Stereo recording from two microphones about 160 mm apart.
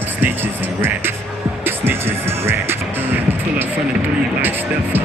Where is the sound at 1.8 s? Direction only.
15° right (ahead or behind).